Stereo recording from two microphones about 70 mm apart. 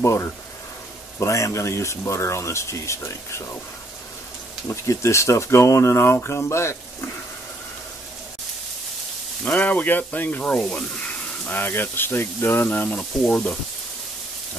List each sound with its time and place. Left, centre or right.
0.0 s speech: left
4.6 s speech: left
9.4 s speech: left
11.4 s speech: left